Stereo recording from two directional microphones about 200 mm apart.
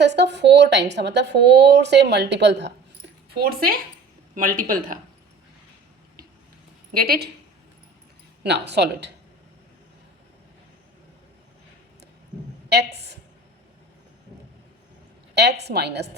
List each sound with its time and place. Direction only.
0.0 s a woman's voice: 60° right (ahead or behind)
3.3 s speech: 50° right (ahead or behind)
6.9 s speech: 50° right (ahead or behind)
8.4 s a woman's voice: 55° right (ahead or behind)
12.7 s a woman's voice: 55° right (ahead or behind)
15.6 s a woman's voice: 55° right (ahead or behind)